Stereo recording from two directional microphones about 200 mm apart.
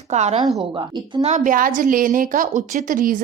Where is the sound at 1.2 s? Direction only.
40° right (ahead or behind).